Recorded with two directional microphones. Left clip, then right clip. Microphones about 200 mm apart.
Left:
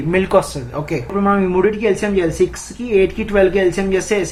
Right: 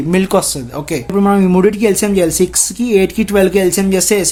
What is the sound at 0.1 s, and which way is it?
Speech, 45° right (ahead or behind).